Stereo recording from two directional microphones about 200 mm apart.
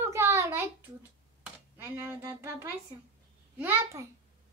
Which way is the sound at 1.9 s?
10° right (ahead or behind).